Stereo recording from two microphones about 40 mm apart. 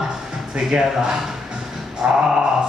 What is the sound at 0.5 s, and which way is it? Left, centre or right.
Speech, centre.